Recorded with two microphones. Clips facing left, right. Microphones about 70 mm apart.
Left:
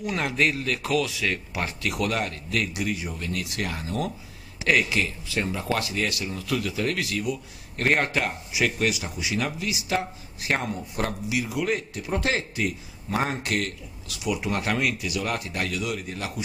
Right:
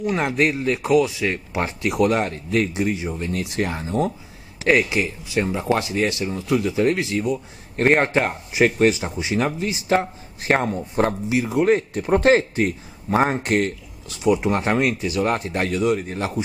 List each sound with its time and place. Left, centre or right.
0.0 s a man's voice: right